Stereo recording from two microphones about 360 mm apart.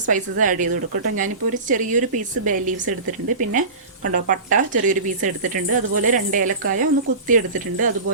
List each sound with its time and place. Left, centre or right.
0.0 s speech: right